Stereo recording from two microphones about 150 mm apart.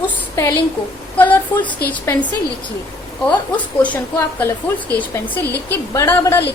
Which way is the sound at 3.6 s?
10° left (ahead or behind).